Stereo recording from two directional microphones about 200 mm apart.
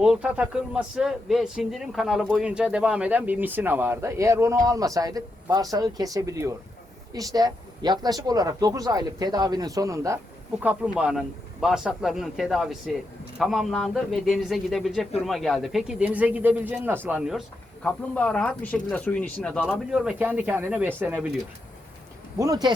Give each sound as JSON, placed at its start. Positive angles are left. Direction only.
{"t": 0.0, "sound": "a man's voice", "side_deg": -5}
{"t": 17.8, "sound": "speech", "side_deg": 5}
{"t": 22.4, "sound": "speech", "side_deg": -20}